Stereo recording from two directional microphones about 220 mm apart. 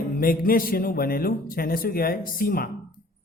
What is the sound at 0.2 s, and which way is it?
A man's voice, 40° left (ahead or behind).